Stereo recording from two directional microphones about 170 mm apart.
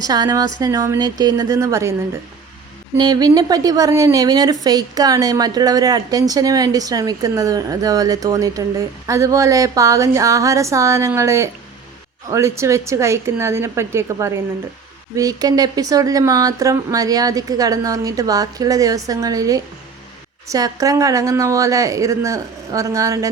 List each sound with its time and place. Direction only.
0.0 s a woman's voice: 20° right (ahead or behind)
3.0 s a woman's voice: 20° right (ahead or behind)